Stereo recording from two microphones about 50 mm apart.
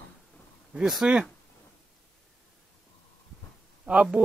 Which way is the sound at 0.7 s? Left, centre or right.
Centre.